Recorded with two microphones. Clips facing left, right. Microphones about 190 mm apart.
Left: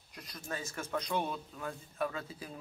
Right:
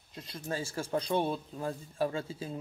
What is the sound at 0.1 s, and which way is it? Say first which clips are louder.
Speech: right 5 dB; 25° right (ahead or behind).